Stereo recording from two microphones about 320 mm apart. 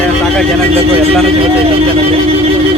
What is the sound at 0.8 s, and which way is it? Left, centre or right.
Speech, centre.